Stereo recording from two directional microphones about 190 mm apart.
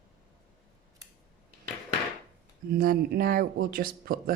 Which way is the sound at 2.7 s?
50° right (ahead or behind).